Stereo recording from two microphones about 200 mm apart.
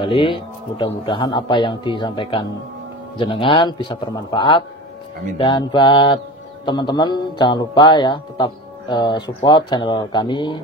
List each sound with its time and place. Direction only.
0.0 s speech: 25° left (ahead or behind)
1.0 s music: 25° left (ahead or behind)